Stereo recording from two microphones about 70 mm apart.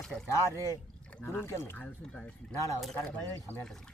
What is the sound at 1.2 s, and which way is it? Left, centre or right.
Speech, left.